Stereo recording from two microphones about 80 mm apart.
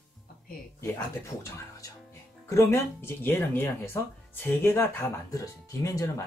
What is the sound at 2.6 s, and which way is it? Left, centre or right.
Speech, left.